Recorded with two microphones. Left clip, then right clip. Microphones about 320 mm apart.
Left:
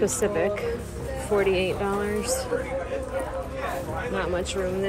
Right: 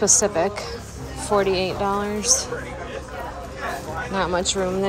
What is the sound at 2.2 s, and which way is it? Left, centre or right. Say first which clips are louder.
Speech: right 6 dB; right.